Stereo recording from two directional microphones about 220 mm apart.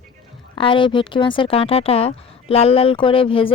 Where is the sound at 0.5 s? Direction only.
25° left (ahead or behind).